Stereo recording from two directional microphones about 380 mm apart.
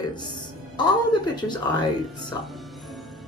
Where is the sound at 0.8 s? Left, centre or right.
Centre.